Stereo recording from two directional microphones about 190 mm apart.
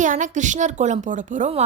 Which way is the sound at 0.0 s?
40° right (ahead or behind).